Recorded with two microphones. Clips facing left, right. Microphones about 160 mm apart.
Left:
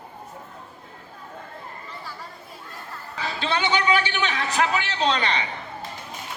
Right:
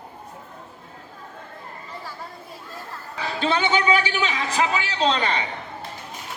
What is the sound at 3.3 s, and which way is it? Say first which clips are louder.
A man's voice: right 3 dB; 45° right (ahead or behind).